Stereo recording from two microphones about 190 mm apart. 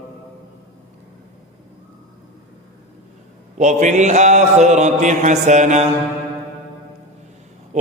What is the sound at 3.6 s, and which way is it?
Mantra, 40° right (ahead or behind).